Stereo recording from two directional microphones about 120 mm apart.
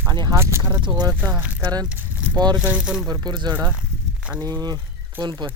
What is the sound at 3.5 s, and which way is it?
Speech, 15° right (ahead or behind).